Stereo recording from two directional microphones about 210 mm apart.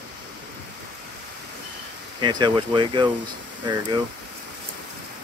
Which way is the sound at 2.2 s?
20° right (ahead or behind).